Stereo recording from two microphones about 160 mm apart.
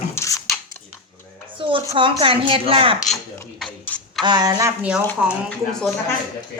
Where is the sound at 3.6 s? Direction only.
Centre (ahead or behind).